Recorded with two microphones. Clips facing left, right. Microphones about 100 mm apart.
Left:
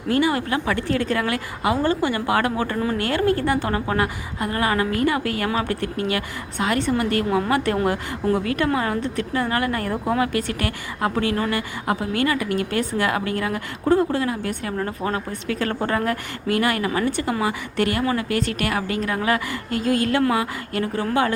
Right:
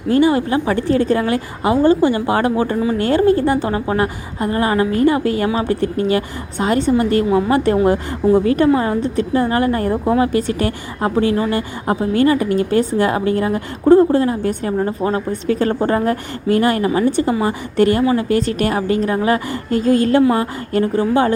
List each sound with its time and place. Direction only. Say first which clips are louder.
0.1 s a woman's voice: right 6 dB; 25° right (ahead or behind)
7.3 s a woman's voice: right 6 dB; 10° right (ahead or behind)
7.5 s a woman's voice: right 6 dB; 30° right (ahead or behind)